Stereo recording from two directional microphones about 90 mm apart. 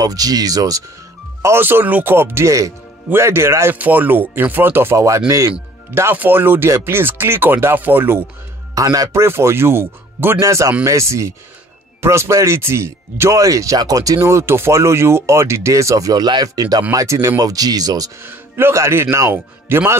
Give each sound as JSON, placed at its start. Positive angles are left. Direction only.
{"t": 0.0, "sound": "speech", "side_deg": -45}
{"t": 1.4, "sound": "speech", "side_deg": -25}
{"t": 3.7, "sound": "speech", "side_deg": -20}
{"t": 5.9, "sound": "speech", "side_deg": -25}
{"t": 8.7, "sound": "speech", "side_deg": -40}
{"t": 10.4, "sound": "speech", "side_deg": -35}
{"t": 14.2, "sound": "speech", "side_deg": -30}
{"t": 18.2, "sound": "speech", "side_deg": -25}